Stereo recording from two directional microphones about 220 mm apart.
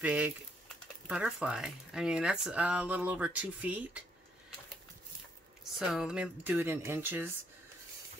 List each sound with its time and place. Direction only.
0.0 s speech: 5° right (ahead or behind)
5.8 s speech: centre (ahead or behind)